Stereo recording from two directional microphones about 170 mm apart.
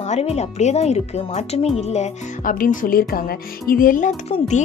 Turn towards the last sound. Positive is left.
turn(degrees=45)  # may be behind; listen again after turning